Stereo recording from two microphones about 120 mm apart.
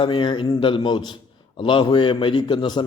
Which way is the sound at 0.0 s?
40° left (ahead or behind).